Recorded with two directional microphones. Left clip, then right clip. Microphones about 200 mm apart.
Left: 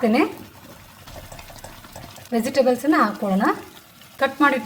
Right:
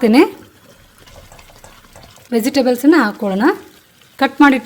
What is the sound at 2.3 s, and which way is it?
Speech, 55° right (ahead or behind).